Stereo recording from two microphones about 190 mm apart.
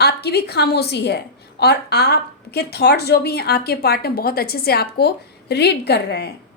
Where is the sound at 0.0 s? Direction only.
60° left (ahead or behind).